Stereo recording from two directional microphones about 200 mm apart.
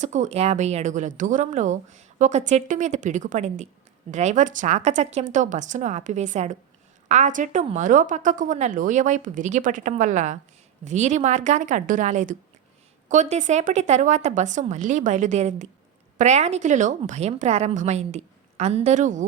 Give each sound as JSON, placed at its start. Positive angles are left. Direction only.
{"t": 0.0, "sound": "speech", "side_deg": -35}